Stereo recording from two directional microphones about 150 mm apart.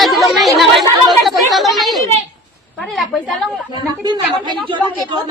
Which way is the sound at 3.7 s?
30° right (ahead or behind).